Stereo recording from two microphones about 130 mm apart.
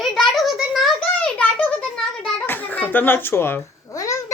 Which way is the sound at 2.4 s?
15° left (ahead or behind).